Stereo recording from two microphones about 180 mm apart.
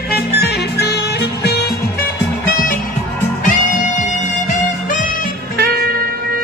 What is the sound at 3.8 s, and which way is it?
Music, 45° left (ahead or behind).